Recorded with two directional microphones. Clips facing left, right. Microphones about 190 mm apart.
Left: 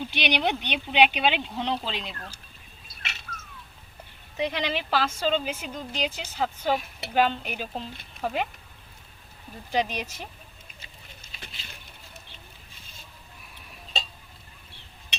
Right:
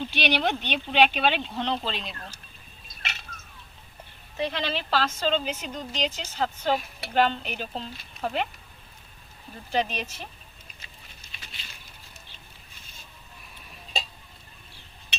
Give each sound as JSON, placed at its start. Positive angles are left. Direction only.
{"t": 0.0, "sound": "speech", "side_deg": 15}
{"t": 4.4, "sound": "speech", "side_deg": 15}
{"t": 9.7, "sound": "speech", "side_deg": 15}
{"t": 11.3, "sound": "a sound", "side_deg": 55}